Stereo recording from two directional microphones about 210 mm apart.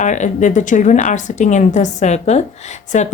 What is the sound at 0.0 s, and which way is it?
A woman's voice, 35° left (ahead or behind).